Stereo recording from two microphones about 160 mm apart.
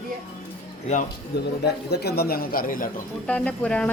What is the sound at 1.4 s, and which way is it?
A man's voice, 90° left.